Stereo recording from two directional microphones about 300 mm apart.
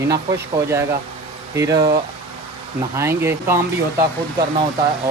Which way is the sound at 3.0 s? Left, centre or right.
Centre.